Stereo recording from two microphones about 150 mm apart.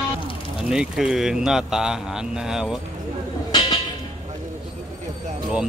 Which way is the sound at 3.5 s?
30° left (ahead or behind).